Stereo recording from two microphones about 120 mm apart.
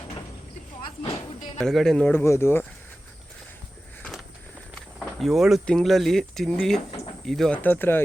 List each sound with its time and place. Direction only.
1.5 s speech: 5° left (ahead or behind)
2.1 s speech: 20° left (ahead or behind)
4.0 s a sound: centre (ahead or behind)
4.9 s speech: centre (ahead or behind)
7.6 s speech: 15° left (ahead or behind)